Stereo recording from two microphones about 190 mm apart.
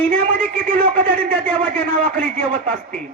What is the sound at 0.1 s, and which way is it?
A man's voice, 50° right (ahead or behind).